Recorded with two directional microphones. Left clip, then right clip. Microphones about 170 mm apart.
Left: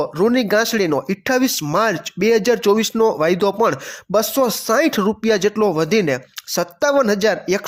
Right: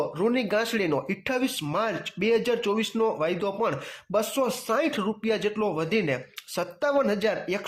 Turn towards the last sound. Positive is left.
turn(degrees=40)  # may be behind; listen again after turning